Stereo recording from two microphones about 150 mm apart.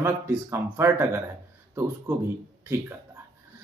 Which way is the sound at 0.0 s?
15° right (ahead or behind).